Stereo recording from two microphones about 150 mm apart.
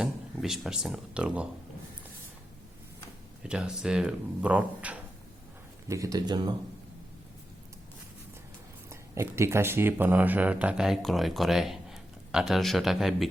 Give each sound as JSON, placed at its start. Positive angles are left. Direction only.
{"t": 0.0, "sound": "speech", "side_deg": 0}
{"t": 3.4, "sound": "speech", "side_deg": -5}
{"t": 5.9, "sound": "speech", "side_deg": -25}
{"t": 8.9, "sound": "speech", "side_deg": -15}